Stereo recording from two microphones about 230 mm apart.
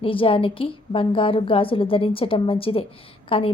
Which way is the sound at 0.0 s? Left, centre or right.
Left.